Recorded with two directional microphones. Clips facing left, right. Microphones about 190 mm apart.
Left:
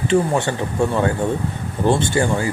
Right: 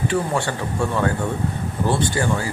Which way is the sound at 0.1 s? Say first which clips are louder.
Left 5 dB; 20° left (ahead or behind).